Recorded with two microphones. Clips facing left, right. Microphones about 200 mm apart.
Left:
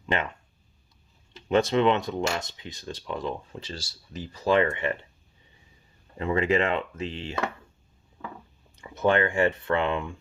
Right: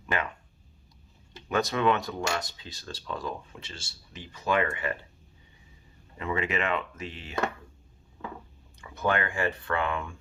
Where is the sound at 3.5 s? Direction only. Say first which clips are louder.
Left 7 dB; 35° left (ahead or behind).